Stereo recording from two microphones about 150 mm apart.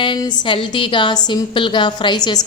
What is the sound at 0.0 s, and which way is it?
A woman's voice, 30° left (ahead or behind).